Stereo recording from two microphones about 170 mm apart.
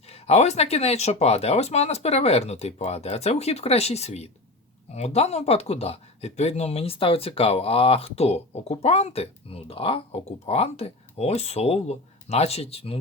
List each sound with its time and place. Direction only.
0.1 s speech: 40° left (ahead or behind)